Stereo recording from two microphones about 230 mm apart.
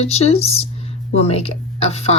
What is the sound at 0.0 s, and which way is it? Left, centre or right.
Speech, left.